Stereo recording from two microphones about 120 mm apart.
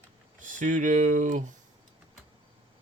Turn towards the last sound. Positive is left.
turn(degrees=-90)